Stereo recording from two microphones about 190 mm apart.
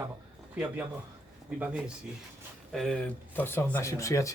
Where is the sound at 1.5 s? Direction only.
5° right (ahead or behind).